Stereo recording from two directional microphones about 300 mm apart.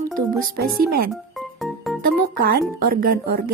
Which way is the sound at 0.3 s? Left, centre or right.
Right.